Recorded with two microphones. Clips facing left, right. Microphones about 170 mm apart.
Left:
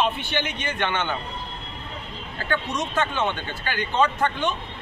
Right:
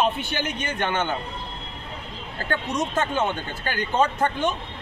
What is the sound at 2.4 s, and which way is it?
A man's voice, 40° right (ahead or behind).